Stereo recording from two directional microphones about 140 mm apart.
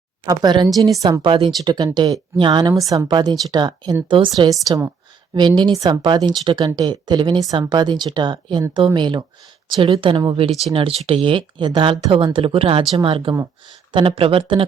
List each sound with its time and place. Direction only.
0.3 s a woman's voice: 30° right (ahead or behind)
1.2 s a woman's voice: 40° right (ahead or behind)